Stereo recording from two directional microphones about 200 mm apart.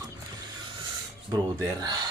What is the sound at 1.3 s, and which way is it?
Speech, 20° right (ahead or behind).